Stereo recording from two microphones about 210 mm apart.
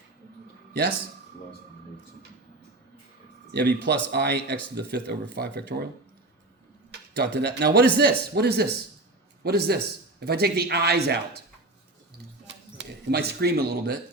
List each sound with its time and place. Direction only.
3.5 s speech: 55° right (ahead or behind)
7.2 s speech: 50° right (ahead or behind)
12.5 s a sound: 55° right (ahead or behind)